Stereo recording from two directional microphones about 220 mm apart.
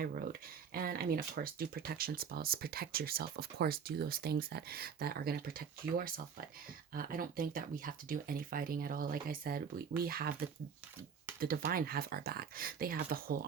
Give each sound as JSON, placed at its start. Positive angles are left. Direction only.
{"t": 0.0, "sound": "speech", "side_deg": -45}